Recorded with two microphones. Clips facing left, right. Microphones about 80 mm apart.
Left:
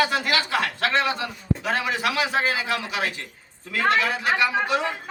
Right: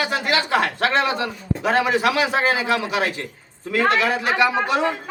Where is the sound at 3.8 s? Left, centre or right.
Right.